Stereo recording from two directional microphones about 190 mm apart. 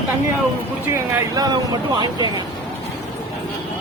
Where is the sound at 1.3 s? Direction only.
20° right (ahead or behind).